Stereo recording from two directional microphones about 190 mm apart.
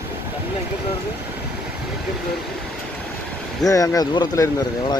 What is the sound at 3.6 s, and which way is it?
Speech, 15° left (ahead or behind).